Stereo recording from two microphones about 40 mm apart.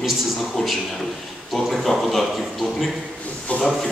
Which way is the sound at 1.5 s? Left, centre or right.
Centre.